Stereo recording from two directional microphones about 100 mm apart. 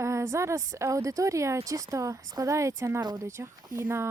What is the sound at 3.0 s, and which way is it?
Speech, 45° right (ahead or behind).